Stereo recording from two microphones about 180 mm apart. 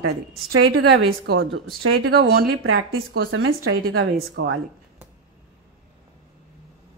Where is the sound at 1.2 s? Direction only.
65° right (ahead or behind).